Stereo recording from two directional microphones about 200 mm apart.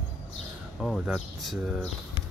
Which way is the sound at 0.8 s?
Centre (ahead or behind).